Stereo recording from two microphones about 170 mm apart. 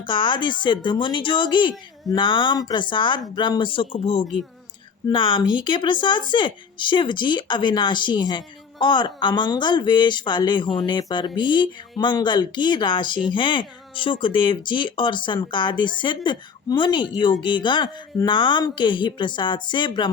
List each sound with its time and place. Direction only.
0.0 s speech: 30° left (ahead or behind)